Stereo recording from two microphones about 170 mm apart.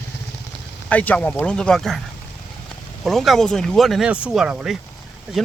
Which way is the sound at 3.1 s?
Centre (ahead or behind).